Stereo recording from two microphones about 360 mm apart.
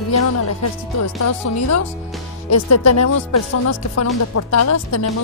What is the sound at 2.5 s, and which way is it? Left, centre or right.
Speech, left.